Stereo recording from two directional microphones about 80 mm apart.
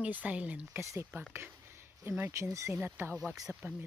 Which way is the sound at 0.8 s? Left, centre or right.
Right.